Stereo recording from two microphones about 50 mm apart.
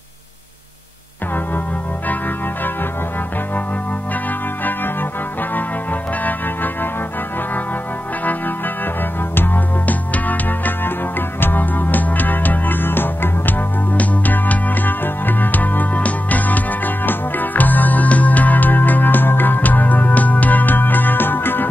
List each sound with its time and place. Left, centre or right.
6.2 s music: left
8.3 s music: left